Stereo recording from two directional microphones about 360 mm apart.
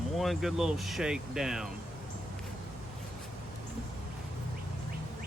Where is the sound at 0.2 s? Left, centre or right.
Centre.